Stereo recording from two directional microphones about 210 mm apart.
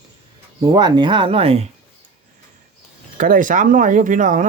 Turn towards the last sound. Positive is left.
turn(degrees=-35)  # may be behind; listen again after turning